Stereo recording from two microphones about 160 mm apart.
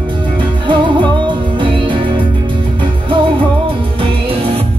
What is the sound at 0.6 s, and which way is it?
Music, 30° right (ahead or behind).